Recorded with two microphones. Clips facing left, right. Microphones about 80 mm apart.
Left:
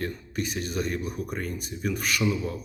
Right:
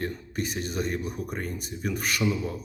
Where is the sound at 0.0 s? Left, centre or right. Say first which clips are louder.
Even; right.